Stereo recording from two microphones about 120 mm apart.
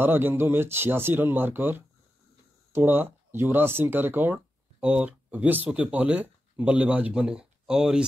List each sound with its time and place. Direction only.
0.0 s speech: 15° right (ahead or behind)